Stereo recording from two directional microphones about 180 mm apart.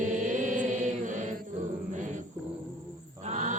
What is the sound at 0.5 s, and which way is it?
Mantra, 45° right (ahead or behind).